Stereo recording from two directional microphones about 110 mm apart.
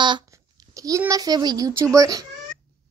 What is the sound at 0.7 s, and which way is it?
A child's voice, 30° right (ahead or behind).